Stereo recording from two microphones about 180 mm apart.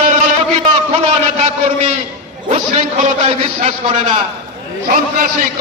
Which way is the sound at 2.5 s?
40° right (ahead or behind).